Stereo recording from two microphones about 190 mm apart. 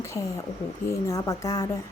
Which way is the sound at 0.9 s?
15° left (ahead or behind).